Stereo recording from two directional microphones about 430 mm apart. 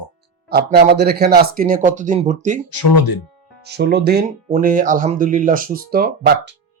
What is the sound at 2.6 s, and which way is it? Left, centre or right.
Speech, left.